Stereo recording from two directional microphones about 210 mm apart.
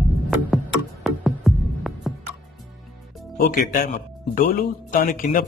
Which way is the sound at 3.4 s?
45° left (ahead or behind).